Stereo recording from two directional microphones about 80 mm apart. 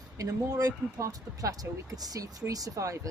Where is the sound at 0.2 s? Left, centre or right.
Right.